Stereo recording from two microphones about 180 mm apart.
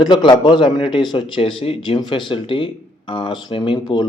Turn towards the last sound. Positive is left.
turn(degrees=25)  # may be behind; listen again after turning